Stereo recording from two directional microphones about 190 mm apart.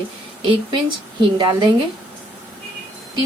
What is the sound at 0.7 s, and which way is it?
A woman's voice, 25° right (ahead or behind).